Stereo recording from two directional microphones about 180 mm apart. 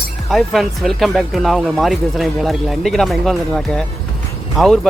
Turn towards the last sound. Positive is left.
turn(degrees=0)  # may be behind; listen again after turning